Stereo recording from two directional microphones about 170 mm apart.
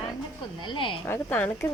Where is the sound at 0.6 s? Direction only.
30° left (ahead or behind).